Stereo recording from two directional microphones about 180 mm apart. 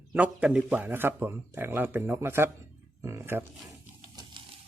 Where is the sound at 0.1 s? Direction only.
10° right (ahead or behind).